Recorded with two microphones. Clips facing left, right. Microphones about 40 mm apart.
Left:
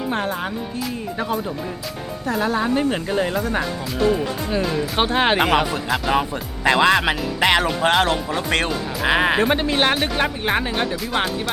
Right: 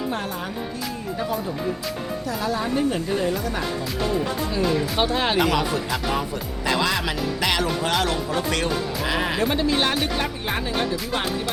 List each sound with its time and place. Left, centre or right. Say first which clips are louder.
0.1 s speech: left 5 dB; left
2.2 s speech: left 6 dB; left